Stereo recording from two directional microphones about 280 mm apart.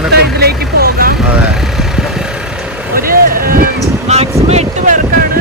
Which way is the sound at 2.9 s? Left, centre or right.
Right.